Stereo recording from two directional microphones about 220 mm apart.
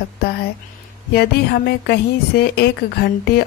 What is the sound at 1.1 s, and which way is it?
A woman's voice, 45° left (ahead or behind).